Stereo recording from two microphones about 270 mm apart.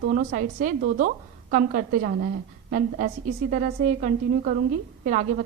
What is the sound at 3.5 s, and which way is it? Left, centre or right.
A woman's voice, right.